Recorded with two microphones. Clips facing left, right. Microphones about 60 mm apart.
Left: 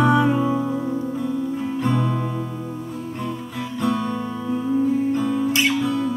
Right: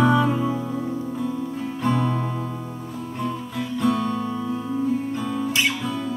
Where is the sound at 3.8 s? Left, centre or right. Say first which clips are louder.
Even; centre.